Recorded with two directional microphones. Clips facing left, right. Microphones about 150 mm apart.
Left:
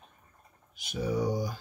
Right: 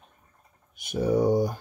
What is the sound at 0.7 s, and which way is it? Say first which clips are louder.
Speech: right 7 dB; 55° right (ahead or behind).